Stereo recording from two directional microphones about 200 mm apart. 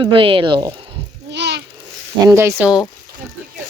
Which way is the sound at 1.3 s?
60° right (ahead or behind).